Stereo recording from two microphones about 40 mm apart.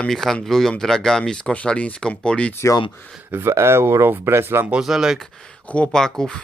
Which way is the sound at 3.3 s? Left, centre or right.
Right.